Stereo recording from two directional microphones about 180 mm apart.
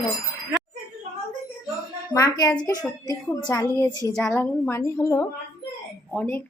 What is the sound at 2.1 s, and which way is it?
A woman's voice, 20° left (ahead or behind).